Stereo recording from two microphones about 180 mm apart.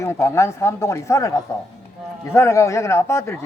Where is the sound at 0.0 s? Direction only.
15° left (ahead or behind).